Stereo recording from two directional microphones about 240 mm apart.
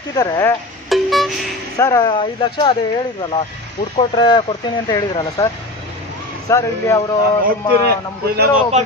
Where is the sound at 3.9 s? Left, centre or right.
Centre.